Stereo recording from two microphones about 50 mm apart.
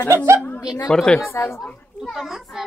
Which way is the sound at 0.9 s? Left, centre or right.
Centre.